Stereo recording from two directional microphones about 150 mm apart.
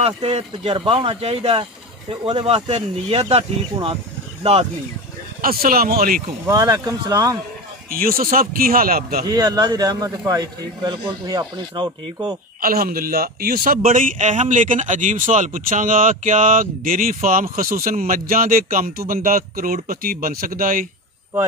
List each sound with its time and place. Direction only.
0.0 s speech: 45° right (ahead or behind)
5.4 s a man's voice: 75° right (ahead or behind)
6.4 s a man's voice: 25° right (ahead or behind)
7.9 s a man's voice: 75° right (ahead or behind)
9.3 s a man's voice: 25° right (ahead or behind)
12.6 s a man's voice: 75° right (ahead or behind)